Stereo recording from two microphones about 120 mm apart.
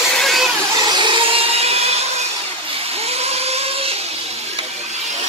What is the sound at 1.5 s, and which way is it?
Music, 60° right (ahead or behind).